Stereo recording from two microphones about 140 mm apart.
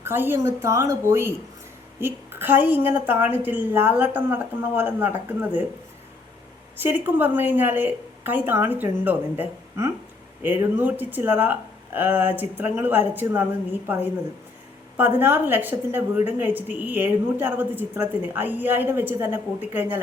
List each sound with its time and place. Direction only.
0.0 s a woman's voice: 15° right (ahead or behind)
6.8 s a woman's voice: 15° right (ahead or behind)